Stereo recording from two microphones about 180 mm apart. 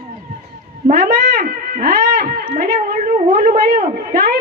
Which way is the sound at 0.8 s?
55° right (ahead or behind).